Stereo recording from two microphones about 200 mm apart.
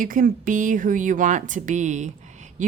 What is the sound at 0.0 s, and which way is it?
Speech, 45° right (ahead or behind).